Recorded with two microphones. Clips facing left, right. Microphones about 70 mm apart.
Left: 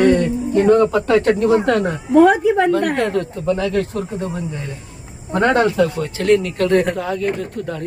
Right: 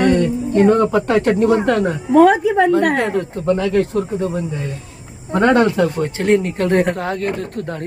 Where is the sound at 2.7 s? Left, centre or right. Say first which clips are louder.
Right 2 dB; right.